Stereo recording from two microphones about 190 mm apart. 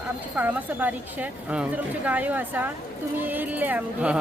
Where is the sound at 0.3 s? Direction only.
10° right (ahead or behind).